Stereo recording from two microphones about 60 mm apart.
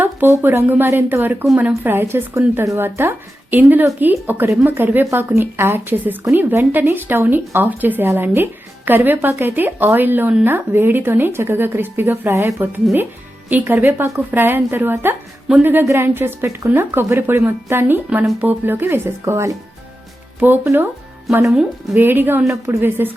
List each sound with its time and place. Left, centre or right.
0.4 s speech: right
19.2 s speech: right
20.4 s speech: right
21.9 s speech: right
22.4 s a woman's voice: right
22.8 s speech: right